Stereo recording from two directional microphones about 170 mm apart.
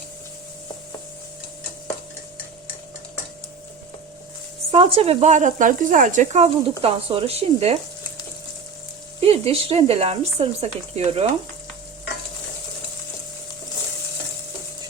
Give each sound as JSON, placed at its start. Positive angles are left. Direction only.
{"t": 4.7, "sound": "speech", "side_deg": -35}
{"t": 9.2, "sound": "speech", "side_deg": -35}